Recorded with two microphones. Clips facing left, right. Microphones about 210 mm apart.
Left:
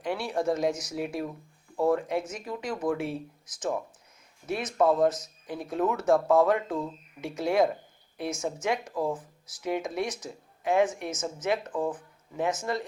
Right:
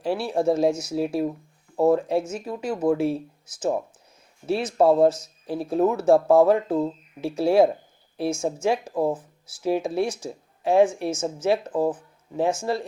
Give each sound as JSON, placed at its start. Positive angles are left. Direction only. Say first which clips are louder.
{"t": 0.0, "sound": "speech", "louder": "right 6 dB", "side_deg": -25}
{"t": 4.4, "sound": "speech", "louder": "right 5 dB", "side_deg": -30}